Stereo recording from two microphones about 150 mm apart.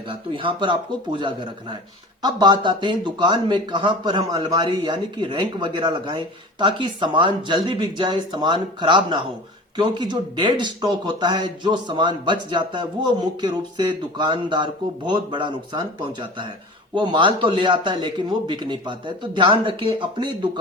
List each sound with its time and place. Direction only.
0.1 s speech: 35° right (ahead or behind)